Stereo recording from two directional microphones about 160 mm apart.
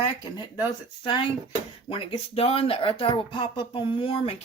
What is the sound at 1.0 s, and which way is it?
Speech, 30° left (ahead or behind).